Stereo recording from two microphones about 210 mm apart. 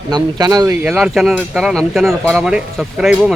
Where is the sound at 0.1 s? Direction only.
20° right (ahead or behind).